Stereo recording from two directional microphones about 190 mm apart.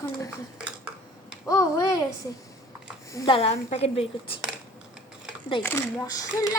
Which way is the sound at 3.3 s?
30° left (ahead or behind).